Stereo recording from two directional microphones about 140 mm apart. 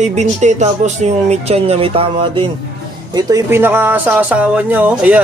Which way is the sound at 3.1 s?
20° right (ahead or behind).